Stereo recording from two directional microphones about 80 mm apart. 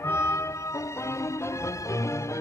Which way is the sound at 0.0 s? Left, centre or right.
Left.